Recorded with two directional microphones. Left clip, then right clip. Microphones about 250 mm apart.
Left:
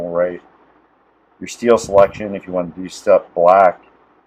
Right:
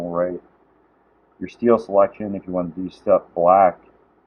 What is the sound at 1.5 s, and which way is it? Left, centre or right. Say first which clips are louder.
Speech: left 4 dB; centre.